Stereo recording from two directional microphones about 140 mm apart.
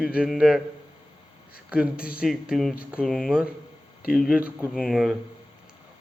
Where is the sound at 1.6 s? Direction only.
10° right (ahead or behind).